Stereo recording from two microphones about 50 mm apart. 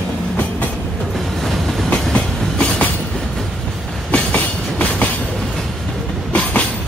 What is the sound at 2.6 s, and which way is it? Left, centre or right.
Train, left.